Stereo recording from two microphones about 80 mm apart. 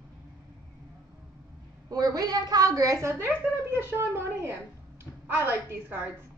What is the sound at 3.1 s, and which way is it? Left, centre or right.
A woman's voice, right.